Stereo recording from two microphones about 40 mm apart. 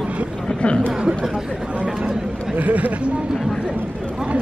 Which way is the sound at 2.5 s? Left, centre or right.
Right.